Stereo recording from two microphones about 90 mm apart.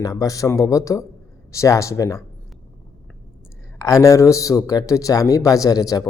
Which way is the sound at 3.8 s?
35° left (ahead or behind).